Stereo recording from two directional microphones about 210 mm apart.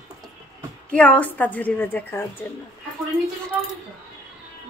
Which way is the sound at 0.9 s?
5° left (ahead or behind).